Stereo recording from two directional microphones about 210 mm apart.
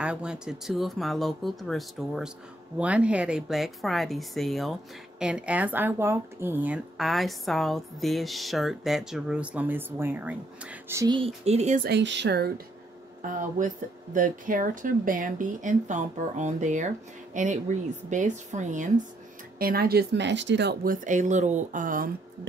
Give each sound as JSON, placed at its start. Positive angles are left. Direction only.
{"t": 0.0, "sound": "speech", "side_deg": -5}
{"t": 11.1, "sound": "speech", "side_deg": -30}
{"t": 11.9, "sound": "speech", "side_deg": -55}